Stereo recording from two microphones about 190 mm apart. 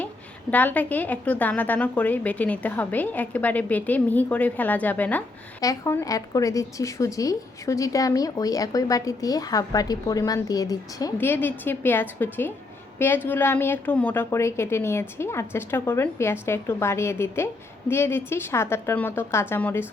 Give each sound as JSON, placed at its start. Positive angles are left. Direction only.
{"t": 0.5, "sound": "a woman's voice", "side_deg": 10}